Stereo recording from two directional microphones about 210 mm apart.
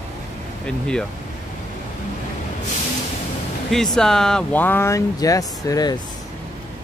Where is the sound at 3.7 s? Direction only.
Centre (ahead or behind); by 6.0 s 20° left (ahead or behind).